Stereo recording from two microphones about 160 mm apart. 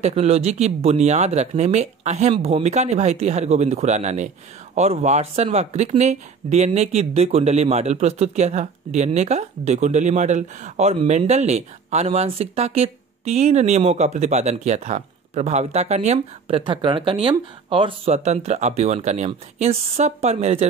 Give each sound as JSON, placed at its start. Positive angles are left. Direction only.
{"t": 0.0, "sound": "speech", "side_deg": -40}